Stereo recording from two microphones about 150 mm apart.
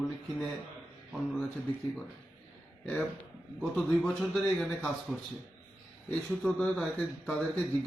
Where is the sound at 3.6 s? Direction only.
Centre (ahead or behind).